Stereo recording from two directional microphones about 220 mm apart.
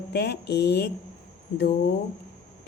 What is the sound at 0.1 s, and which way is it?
A woman's voice, 50° left (ahead or behind).